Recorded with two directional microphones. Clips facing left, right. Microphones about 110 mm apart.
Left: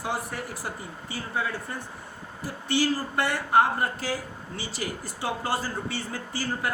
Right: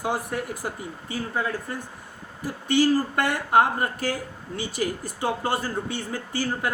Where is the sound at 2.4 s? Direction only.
50° right (ahead or behind).